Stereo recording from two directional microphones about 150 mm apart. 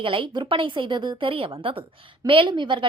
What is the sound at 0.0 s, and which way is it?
A woman's voice, 35° right (ahead or behind).